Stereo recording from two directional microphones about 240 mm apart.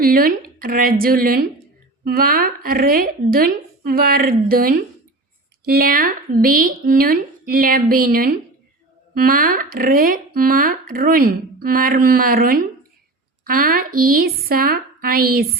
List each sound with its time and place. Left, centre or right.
0.0 s speech: right